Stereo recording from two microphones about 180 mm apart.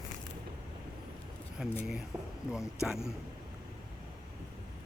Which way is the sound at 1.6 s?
Centre (ahead or behind).